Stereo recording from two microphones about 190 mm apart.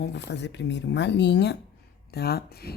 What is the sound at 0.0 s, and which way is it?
Speech, 65° left (ahead or behind).